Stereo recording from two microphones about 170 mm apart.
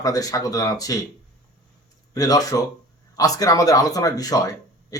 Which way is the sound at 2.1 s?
20° left (ahead or behind).